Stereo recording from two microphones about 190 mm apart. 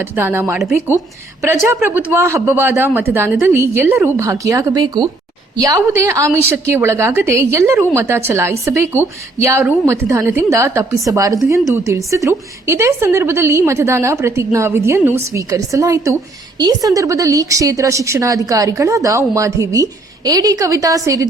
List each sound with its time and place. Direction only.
0.0 s a woman's voice: 10° right (ahead or behind)
1.7 s a woman's voice: 10° right (ahead or behind)